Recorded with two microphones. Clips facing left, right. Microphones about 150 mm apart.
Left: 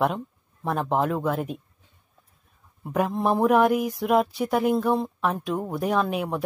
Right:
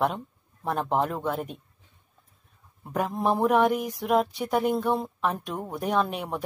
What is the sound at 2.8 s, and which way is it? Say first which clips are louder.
Speech: left 2 dB; centre (ahead or behind).